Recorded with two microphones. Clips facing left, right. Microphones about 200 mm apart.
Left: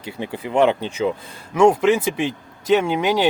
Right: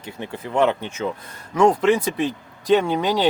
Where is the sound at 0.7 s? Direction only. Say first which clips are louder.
Left 3 dB; 30° left (ahead or behind).